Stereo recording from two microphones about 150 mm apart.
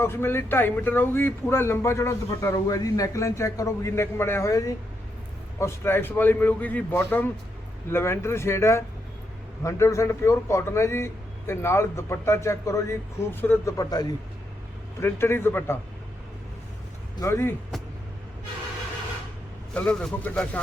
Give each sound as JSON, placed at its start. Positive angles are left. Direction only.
{"t": 0.0, "sound": "a man's voice", "side_deg": 15}
{"t": 17.2, "sound": "a man's voice", "side_deg": 15}
{"t": 19.7, "sound": "a man's voice", "side_deg": 5}